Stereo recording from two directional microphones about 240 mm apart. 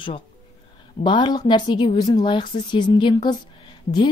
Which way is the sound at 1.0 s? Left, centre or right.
Centre.